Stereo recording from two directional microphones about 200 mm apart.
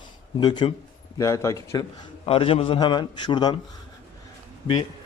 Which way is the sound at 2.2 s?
30° left (ahead or behind).